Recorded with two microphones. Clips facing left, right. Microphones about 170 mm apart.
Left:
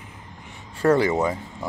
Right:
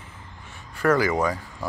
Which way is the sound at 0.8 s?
25° left (ahead or behind).